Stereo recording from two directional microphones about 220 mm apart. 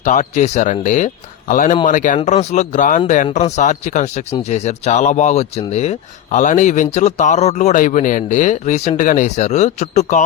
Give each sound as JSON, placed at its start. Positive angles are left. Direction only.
{"t": 0.0, "sound": "speech", "side_deg": 35}